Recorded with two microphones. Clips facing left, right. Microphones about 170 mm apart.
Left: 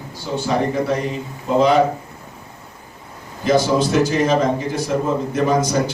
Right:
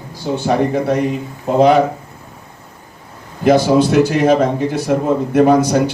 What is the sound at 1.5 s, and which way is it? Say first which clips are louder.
Speech: right 3 dB; 55° right (ahead or behind).